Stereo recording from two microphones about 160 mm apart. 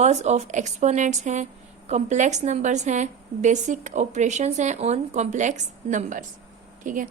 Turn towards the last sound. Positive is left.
turn(degrees=-55)  # may be behind; listen again after turning